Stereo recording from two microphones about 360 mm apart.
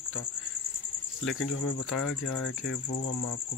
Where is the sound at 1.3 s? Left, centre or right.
Left.